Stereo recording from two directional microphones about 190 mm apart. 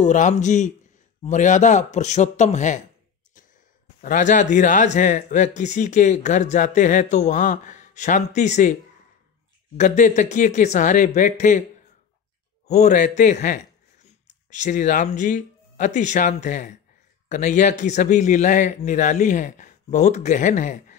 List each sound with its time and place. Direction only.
0.0 s speech: 40° left (ahead or behind)
4.0 s speech: 40° left (ahead or behind)
9.8 s speech: 40° left (ahead or behind)
12.6 s speech: 40° left (ahead or behind)